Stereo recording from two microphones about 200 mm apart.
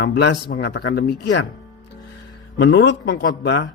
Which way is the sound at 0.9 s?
45° left (ahead or behind).